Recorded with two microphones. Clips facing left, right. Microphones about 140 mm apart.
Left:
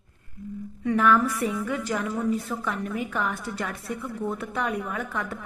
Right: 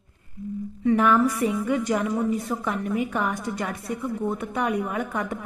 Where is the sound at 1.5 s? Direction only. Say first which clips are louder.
Right 4 dB; 15° right (ahead or behind).